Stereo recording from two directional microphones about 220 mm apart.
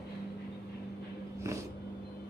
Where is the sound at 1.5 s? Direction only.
15° right (ahead or behind).